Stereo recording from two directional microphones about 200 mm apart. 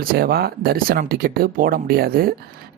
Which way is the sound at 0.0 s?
50° right (ahead or behind).